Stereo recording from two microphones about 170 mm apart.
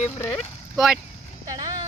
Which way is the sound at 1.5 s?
20° right (ahead or behind).